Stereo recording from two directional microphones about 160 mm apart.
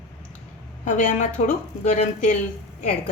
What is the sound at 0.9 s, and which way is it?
A woman's voice, 55° left (ahead or behind).